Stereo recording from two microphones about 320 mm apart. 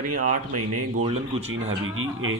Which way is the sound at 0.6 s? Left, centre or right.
Right.